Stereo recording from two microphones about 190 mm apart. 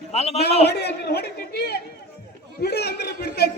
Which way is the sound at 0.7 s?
60° left (ahead or behind).